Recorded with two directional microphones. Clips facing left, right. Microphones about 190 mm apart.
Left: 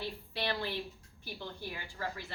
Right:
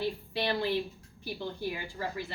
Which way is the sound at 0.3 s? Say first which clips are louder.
Right 6 dB; 15° right (ahead or behind).